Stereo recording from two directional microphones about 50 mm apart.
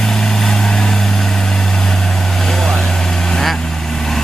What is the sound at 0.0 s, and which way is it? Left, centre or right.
Vehicle, centre.